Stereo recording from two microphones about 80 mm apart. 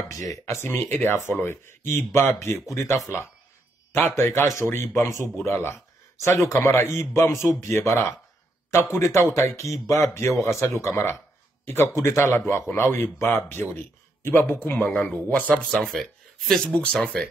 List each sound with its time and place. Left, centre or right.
0.1 s a man's voice: left
0.7 s a man's voice: left
14.9 s speech: centre